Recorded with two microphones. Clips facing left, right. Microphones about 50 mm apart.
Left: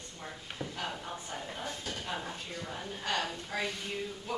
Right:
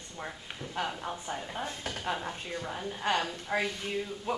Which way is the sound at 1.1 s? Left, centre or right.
Centre.